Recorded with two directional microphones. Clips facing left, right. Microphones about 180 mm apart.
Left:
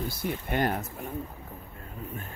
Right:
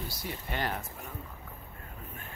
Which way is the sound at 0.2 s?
50° left (ahead or behind).